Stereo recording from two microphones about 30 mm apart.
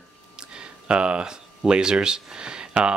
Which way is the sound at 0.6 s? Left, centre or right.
Right.